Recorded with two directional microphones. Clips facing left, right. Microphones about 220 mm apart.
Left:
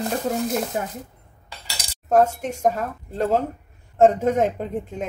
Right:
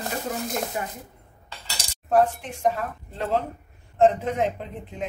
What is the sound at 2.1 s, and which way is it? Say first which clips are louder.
A woman's voice: left 3 dB; 45° left (ahead or behind).